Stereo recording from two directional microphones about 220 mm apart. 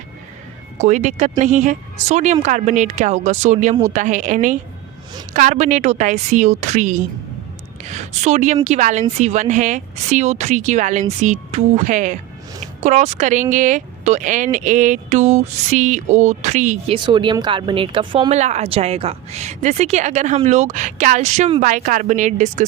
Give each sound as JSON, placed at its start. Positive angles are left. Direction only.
{"t": 0.8, "sound": "a woman's voice", "side_deg": -35}